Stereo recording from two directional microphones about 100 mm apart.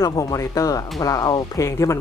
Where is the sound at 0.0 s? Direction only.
35° left (ahead or behind).